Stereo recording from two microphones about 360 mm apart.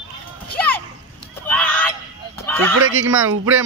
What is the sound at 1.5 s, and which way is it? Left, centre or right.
Goose, centre.